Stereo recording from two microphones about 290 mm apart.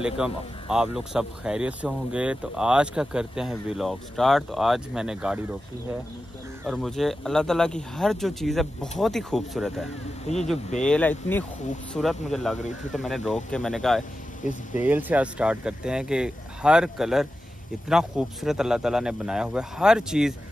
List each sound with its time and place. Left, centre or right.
0.2 s speech: centre
6.6 s speech: centre
10.2 s speech: left
10.9 s speech: centre
14.4 s speech: left
14.8 s speech: centre